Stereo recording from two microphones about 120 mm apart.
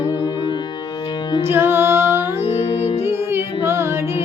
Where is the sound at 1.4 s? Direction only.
20° right (ahead or behind).